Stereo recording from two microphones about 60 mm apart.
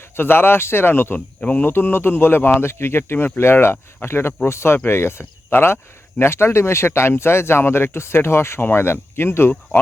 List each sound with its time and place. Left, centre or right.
0.2 s speech: left
1.4 s speech: left
1.6 s speech: left